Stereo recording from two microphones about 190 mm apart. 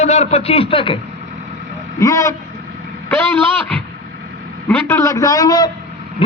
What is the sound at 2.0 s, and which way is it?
Speech, 15° left (ahead or behind).